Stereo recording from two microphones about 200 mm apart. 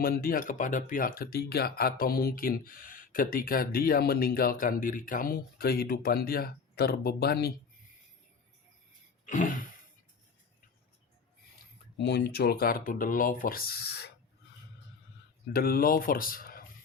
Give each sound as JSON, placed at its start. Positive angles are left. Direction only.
{"t": 0.0, "sound": "speech", "side_deg": 45}
{"t": 9.2, "sound": "a sound", "side_deg": 40}
{"t": 11.9, "sound": "speech", "side_deg": 60}
{"t": 15.5, "sound": "speech", "side_deg": 45}